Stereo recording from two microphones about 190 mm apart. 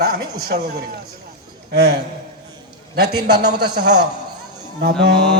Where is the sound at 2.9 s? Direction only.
60° right (ahead or behind).